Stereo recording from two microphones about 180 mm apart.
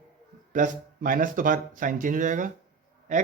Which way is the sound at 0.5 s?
45° right (ahead or behind).